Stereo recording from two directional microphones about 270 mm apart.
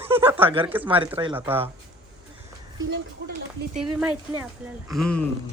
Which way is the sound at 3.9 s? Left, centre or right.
Centre.